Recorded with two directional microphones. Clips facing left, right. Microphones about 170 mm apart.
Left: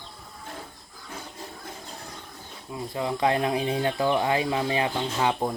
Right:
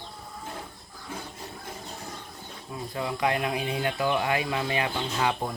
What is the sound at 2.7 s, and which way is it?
Speech, 25° left (ahead or behind).